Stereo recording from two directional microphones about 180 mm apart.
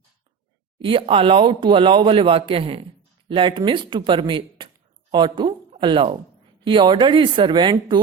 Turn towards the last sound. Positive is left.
turn(degrees=-25)  # may be behind; listen again after turning